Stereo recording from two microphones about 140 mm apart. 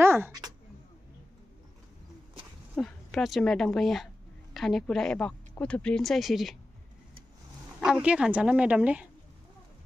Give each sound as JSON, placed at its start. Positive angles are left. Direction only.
{"t": 0.0, "sound": "a sound", "side_deg": -15}
{"t": 2.7, "sound": "a woman's voice", "side_deg": 5}
{"t": 7.8, "sound": "a woman's voice", "side_deg": -5}